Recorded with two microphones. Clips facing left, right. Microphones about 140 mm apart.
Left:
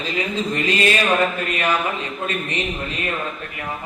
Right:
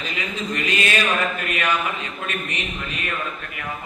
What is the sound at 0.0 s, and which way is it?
Speech, 30° left (ahead or behind).